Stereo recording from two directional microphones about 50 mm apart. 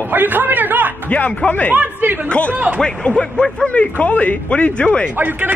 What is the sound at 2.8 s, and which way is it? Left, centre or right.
Speech, centre.